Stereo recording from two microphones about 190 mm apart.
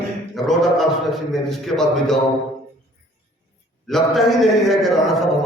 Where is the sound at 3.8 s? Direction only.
Centre (ahead or behind).